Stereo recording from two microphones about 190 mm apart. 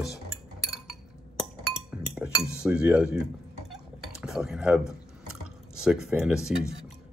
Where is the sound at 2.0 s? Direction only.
5° right (ahead or behind).